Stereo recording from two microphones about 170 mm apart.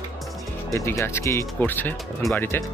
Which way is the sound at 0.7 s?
15° left (ahead or behind).